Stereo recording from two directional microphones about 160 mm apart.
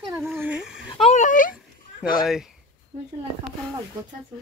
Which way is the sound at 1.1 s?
50° left (ahead or behind).